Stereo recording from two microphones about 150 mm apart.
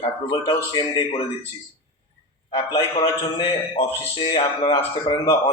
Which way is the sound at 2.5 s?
35° left (ahead or behind).